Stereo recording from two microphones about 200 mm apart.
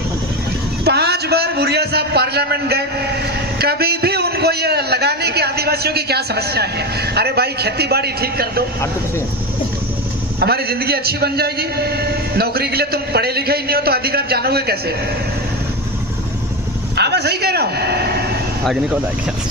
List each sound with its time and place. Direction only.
0.9 s a man's voice: 55° right (ahead or behind)
10.4 s a man's voice: 50° right (ahead or behind)
17.0 s a man's voice: 55° right (ahead or behind)
18.6 s speech: centre (ahead or behind)